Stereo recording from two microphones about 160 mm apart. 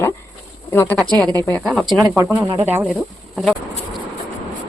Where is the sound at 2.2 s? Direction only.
15° right (ahead or behind).